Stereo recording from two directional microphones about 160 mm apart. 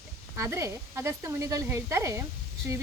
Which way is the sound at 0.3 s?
20° right (ahead or behind).